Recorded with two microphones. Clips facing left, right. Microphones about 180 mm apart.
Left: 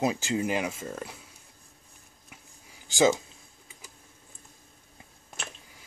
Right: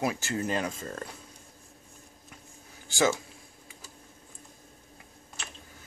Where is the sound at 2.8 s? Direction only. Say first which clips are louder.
Left 4 dB; 20° left (ahead or behind).